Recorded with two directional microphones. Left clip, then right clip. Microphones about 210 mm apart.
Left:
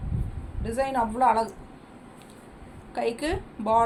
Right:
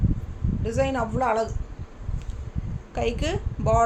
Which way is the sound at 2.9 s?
25° right (ahead or behind).